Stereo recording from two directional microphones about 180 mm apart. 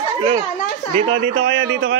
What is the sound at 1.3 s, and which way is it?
Speech, 90° right.